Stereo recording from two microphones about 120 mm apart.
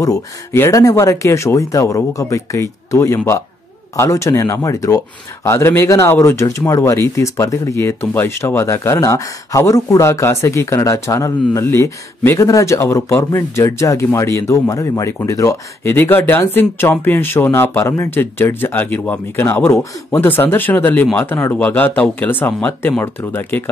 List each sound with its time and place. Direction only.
0.0 s speech: 25° left (ahead or behind)